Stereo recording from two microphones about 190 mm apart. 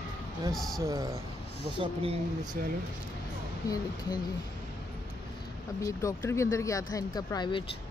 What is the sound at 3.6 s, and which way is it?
Speech, 20° left (ahead or behind).